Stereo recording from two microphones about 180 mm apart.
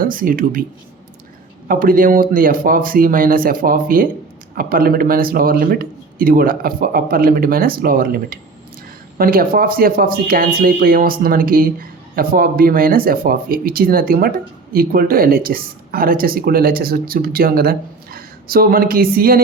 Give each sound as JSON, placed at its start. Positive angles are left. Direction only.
{"t": 0.0, "sound": "speech", "side_deg": -50}
{"t": 1.6, "sound": "speech", "side_deg": -50}